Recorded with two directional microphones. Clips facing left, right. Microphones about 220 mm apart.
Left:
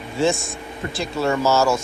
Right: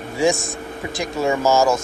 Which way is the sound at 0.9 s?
15° right (ahead or behind).